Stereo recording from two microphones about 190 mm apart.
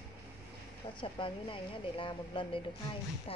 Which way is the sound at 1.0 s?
25° left (ahead or behind).